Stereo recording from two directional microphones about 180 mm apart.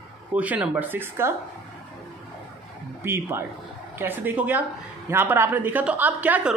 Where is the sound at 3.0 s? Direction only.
10° right (ahead or behind).